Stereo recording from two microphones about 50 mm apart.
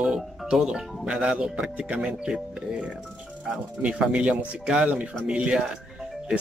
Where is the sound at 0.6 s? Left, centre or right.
Centre.